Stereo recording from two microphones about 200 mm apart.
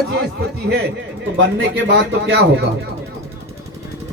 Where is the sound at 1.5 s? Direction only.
60° right (ahead or behind).